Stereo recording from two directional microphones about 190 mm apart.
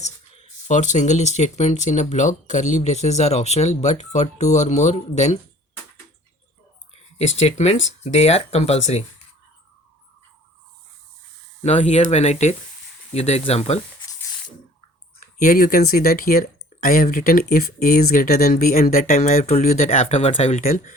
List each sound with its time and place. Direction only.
0.0 s speech: 40° left (ahead or behind)
7.3 s speech: 35° left (ahead or behind)
11.6 s speech: 35° left (ahead or behind)
15.4 s speech: 45° left (ahead or behind)